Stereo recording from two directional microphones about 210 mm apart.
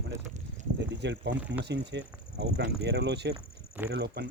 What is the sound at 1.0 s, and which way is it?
Speech, 60° right (ahead or behind).